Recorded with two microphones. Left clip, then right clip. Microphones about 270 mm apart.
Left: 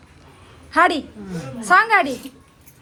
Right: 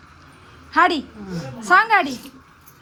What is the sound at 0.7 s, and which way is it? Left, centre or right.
A woman's voice, centre.